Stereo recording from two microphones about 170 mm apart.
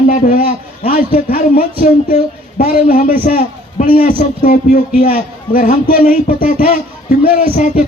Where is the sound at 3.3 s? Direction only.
60° left (ahead or behind).